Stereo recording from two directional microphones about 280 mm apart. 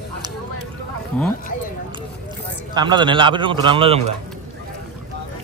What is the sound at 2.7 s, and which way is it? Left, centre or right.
A man's voice, centre.